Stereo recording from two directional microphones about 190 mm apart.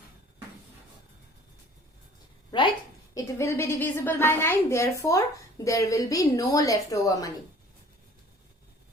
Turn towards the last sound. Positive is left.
turn(degrees=15)  # may be behind; listen again after turning